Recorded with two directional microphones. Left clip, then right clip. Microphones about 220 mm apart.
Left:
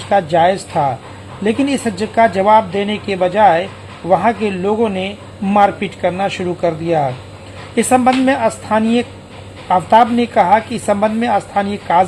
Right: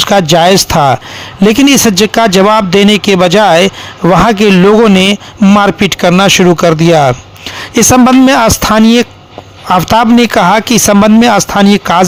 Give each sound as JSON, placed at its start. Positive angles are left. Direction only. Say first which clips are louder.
{"t": 0.1, "sound": "speech", "louder": "right 4 dB", "side_deg": -45}